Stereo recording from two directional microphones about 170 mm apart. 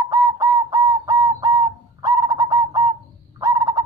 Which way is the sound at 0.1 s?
20° right (ahead or behind).